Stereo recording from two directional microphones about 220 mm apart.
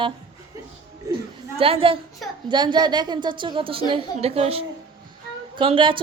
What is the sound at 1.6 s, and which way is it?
A woman's voice, 25° right (ahead or behind).